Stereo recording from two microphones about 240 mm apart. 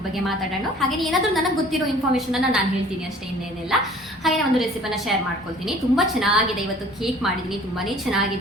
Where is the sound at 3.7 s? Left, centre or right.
Centre.